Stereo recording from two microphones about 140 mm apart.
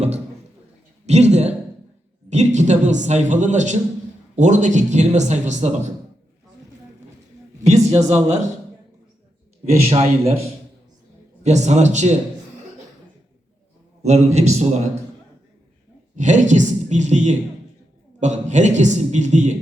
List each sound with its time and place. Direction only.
1.0 s a man's voice: 55° right (ahead or behind)
7.6 s a man's voice: 50° right (ahead or behind)
9.6 s a man's voice: 50° right (ahead or behind)
11.4 s a man's voice: 55° right (ahead or behind)
14.0 s a man's voice: 55° right (ahead or behind)
16.1 s a woman's voice: 60° right (ahead or behind)